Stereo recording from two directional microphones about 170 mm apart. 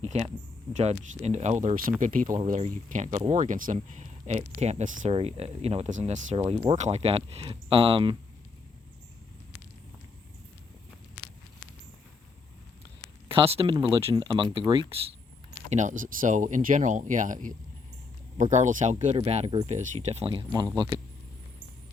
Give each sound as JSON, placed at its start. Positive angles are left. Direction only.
{"t": 0.0, "sound": "speech", "side_deg": -40}
{"t": 13.2, "sound": "speech", "side_deg": -30}
{"t": 15.7, "sound": "speech", "side_deg": -45}
{"t": 18.5, "sound": "speech", "side_deg": -45}